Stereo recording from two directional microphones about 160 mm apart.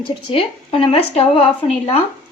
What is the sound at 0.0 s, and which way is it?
A woman's voice, 35° left (ahead or behind).